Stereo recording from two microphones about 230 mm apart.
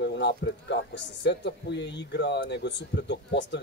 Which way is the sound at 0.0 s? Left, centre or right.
Left.